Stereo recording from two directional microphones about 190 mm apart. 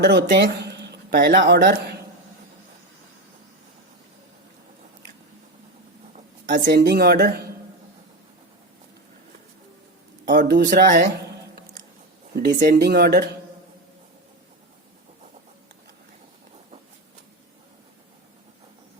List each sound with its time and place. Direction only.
0.0 s speech: 60° right (ahead or behind)
6.5 s speech: 60° right (ahead or behind)
10.2 s speech: 60° right (ahead or behind)
11.5 s a sound: 45° right (ahead or behind)
12.3 s speech: 55° right (ahead or behind)